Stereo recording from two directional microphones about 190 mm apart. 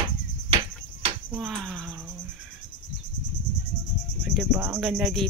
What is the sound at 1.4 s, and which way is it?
Speech, 5° left (ahead or behind).